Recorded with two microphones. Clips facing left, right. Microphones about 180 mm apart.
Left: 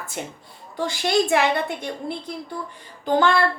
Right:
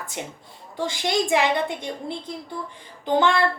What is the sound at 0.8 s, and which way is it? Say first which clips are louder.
A woman's voice: left 3 dB; 20° right (ahead or behind).